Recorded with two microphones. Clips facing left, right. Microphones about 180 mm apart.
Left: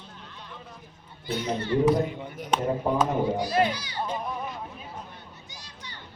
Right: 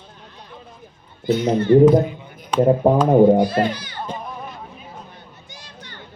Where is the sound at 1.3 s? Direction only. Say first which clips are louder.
Right 12 dB; 50° right (ahead or behind).